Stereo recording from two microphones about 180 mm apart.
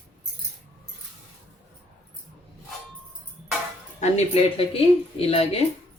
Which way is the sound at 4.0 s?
35° left (ahead or behind).